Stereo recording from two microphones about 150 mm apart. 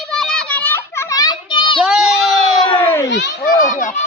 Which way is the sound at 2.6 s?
35° left (ahead or behind).